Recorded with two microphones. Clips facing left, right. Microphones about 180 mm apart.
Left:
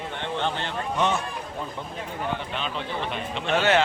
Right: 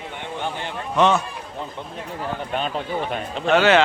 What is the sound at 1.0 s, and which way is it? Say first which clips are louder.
Speech: right 7 dB; 90° right.